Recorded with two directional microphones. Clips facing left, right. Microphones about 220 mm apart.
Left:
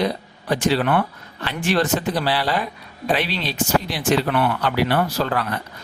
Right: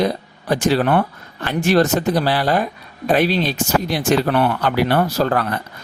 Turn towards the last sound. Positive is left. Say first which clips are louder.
# right 4 dB
turn(degrees=-45)  # may be behind; listen again after turning